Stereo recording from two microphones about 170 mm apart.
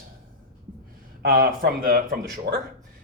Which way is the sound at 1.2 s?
55° right (ahead or behind).